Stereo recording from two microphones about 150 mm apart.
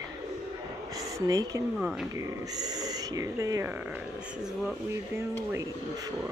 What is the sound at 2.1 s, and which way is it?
Speech, 25° right (ahead or behind).